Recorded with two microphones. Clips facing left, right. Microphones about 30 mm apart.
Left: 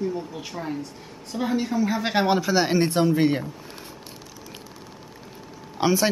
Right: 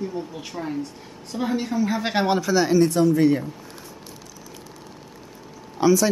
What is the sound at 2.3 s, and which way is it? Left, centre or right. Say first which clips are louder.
Speech: right 1 dB; centre.